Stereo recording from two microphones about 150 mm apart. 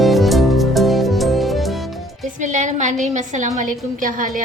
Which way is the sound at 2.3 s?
55° right (ahead or behind).